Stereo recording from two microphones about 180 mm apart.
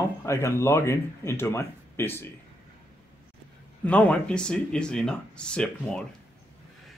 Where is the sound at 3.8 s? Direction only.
10° left (ahead or behind).